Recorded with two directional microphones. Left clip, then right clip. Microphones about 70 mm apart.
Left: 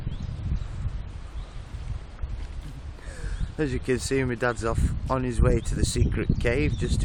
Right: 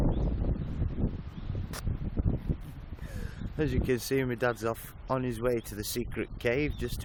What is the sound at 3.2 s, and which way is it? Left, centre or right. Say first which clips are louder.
Speech: left 3 dB; right.